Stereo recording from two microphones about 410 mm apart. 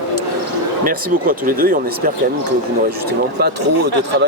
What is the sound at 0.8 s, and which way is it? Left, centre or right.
Speech, centre.